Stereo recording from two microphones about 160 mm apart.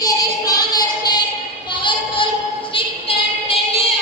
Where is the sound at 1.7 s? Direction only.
30° left (ahead or behind).